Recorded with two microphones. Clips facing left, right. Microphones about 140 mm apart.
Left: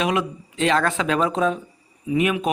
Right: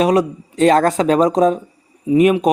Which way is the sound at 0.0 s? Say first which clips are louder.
Right 8 dB; 40° right (ahead or behind).